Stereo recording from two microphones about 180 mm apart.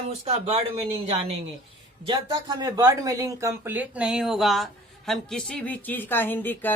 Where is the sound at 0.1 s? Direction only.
35° right (ahead or behind).